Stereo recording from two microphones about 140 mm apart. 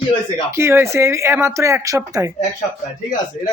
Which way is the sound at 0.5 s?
20° right (ahead or behind).